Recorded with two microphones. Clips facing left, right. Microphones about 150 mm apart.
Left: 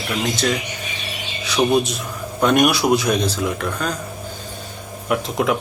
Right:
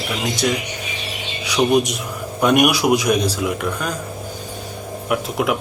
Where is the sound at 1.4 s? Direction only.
15° right (ahead or behind).